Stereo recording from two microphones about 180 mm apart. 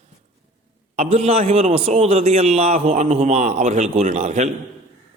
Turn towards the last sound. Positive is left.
turn(degrees=-40)  # may be behind; listen again after turning